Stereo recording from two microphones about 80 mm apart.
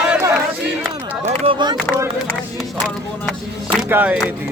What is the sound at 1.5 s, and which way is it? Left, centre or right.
Speech, right.